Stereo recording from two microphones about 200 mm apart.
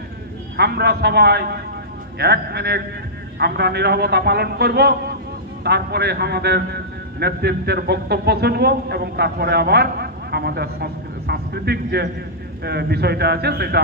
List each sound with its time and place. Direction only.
0.6 s a man's voice: 55° right (ahead or behind)